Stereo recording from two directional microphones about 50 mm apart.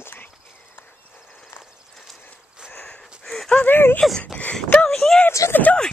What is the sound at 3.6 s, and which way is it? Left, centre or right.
Speech, left.